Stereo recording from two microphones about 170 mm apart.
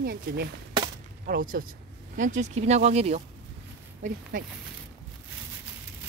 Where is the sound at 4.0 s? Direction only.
55° right (ahead or behind).